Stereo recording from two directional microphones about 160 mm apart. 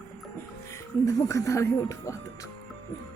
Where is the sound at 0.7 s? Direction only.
20° left (ahead or behind).